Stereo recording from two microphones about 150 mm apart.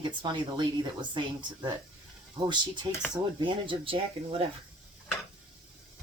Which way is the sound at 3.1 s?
30° right (ahead or behind).